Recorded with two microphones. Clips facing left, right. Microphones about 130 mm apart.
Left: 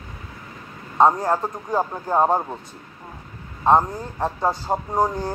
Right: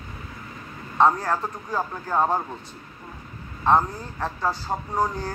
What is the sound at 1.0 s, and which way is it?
A man's voice, 20° left (ahead or behind).